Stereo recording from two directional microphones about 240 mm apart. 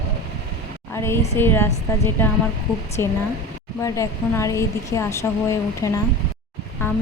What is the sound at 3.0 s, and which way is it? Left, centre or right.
Speech, centre.